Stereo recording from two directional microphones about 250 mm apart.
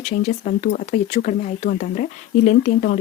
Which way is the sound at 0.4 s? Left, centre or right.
Left.